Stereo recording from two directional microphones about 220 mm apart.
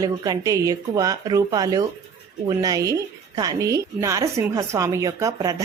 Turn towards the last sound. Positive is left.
turn(degrees=-15)  # may be behind; listen again after turning